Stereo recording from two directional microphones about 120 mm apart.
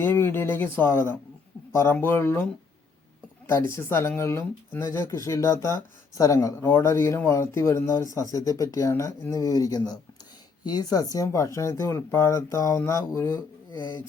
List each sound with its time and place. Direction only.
0.0 s speech: 20° left (ahead or behind)
6.6 s speech: 15° left (ahead or behind)